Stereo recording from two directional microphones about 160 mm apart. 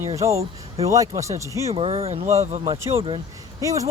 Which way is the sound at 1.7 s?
40° right (ahead or behind).